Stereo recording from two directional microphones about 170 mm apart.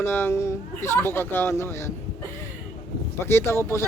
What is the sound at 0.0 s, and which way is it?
Speech, 15° left (ahead or behind).